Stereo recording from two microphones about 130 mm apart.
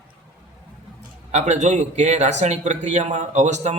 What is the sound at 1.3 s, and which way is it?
Speech, 60° right (ahead or behind).